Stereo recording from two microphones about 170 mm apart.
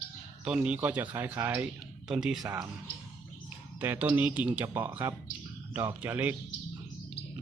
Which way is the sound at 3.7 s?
10° right (ahead or behind).